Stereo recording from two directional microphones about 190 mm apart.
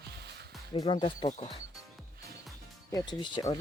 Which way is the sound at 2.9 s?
20° left (ahead or behind).